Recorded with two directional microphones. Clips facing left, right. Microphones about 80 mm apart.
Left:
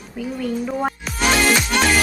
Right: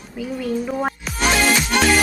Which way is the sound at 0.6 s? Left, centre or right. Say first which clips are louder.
Even; centre.